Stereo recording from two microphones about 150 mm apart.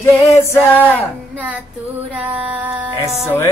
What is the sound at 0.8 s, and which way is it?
Music, 10° right (ahead or behind).